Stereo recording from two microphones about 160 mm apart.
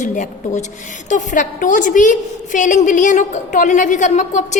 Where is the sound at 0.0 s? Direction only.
50° left (ahead or behind).